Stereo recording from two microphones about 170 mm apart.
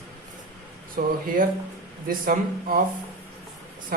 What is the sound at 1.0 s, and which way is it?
Speech, 60° right (ahead or behind).